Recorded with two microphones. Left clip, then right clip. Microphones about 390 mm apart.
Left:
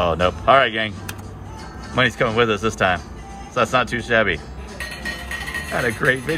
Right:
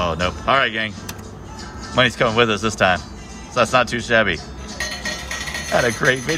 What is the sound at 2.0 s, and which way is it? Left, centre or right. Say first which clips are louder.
Speech: right 2 dB; centre.